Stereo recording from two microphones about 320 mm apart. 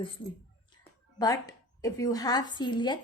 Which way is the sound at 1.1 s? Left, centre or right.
Centre.